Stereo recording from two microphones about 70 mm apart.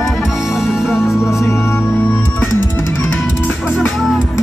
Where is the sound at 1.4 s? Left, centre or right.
Left.